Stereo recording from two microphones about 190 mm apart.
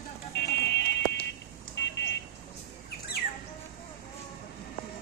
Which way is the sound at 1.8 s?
70° left (ahead or behind).